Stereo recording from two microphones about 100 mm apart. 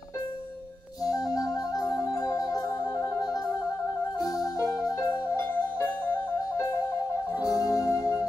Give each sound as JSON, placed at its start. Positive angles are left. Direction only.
{"t": 1.0, "sound": "music", "side_deg": 40}
{"t": 4.2, "sound": "music", "side_deg": 40}
{"t": 7.4, "sound": "music", "side_deg": 35}